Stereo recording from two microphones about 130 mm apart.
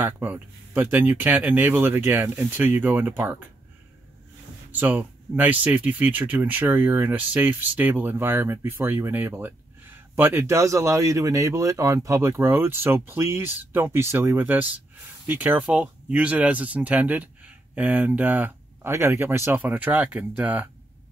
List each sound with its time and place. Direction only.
0.0 s speech: 15° right (ahead or behind)
4.7 s speech: 15° right (ahead or behind)